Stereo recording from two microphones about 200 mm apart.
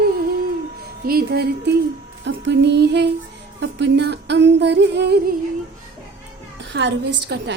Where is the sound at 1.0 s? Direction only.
50° right (ahead or behind).